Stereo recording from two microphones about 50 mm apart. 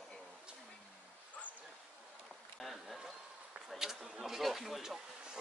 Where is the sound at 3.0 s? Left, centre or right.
Centre.